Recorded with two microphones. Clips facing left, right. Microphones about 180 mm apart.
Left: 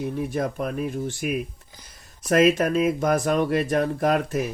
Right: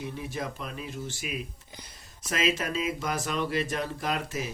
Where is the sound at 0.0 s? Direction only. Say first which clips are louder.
Left 9 dB; 55° left (ahead or behind).